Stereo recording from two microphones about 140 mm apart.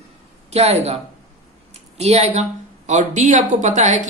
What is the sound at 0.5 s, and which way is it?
Speech, 50° right (ahead or behind).